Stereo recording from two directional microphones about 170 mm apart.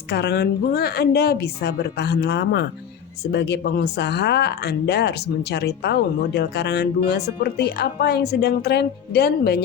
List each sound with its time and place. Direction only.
0.1 s speech: 75° left (ahead or behind)